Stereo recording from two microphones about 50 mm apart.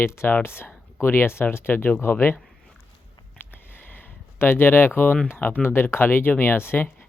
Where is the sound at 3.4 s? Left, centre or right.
Left.